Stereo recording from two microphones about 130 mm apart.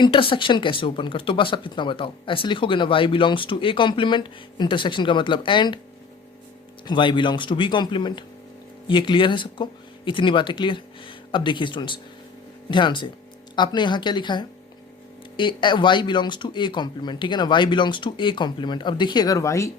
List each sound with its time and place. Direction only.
0.0 s speech: 40° left (ahead or behind)
6.8 s speech: 35° left (ahead or behind)